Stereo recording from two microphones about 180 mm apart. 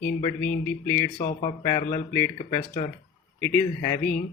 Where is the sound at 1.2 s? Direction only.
50° left (ahead or behind).